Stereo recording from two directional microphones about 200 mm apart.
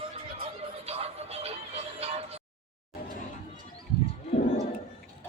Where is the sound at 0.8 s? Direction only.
30° right (ahead or behind).